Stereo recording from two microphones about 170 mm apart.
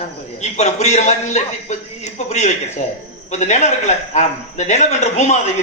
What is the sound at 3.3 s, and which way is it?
A man's voice, 45° left (ahead or behind).